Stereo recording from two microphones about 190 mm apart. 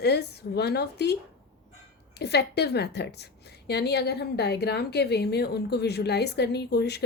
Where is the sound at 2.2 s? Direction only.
60° left (ahead or behind).